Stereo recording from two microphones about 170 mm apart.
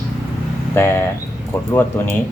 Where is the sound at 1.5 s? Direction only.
15° left (ahead or behind).